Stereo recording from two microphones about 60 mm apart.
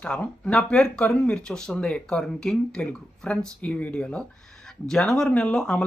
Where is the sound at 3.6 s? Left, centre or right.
Left.